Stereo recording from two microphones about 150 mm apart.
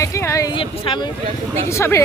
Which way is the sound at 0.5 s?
35° left (ahead or behind).